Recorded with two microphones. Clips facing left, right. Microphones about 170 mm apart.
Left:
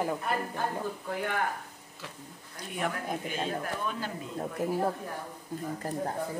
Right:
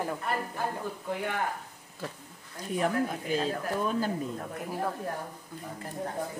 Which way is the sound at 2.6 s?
35° right (ahead or behind).